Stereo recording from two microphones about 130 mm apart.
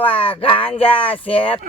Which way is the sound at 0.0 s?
45° left (ahead or behind).